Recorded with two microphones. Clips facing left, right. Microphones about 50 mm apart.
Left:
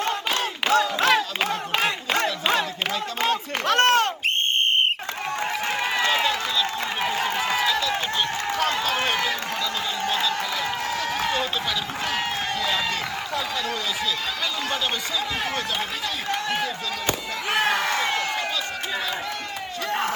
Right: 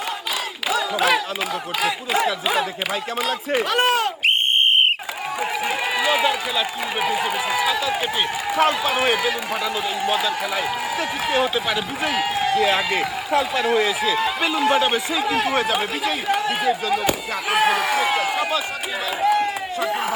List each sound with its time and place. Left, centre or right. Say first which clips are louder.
0.7 s a sound: even; centre
3.2 s speech: right 3 dB; centre
5.4 s a man's voice: right 3 dB; centre
17.1 s fireworks: right 4 dB; centre
19.2 s run: right 12 dB; right
19.9 s speech: left 1 dB; centre